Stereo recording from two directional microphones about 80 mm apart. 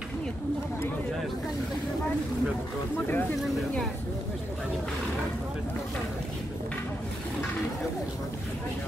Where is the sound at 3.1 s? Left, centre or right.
Left.